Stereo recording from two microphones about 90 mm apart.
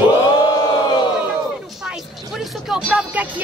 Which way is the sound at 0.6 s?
50° left (ahead or behind).